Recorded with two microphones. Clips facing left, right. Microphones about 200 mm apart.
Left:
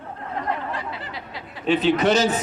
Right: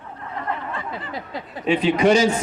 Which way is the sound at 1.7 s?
10° right (ahead or behind).